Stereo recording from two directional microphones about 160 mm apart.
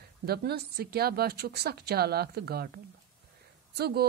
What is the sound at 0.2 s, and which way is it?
A woman's voice, 80° right.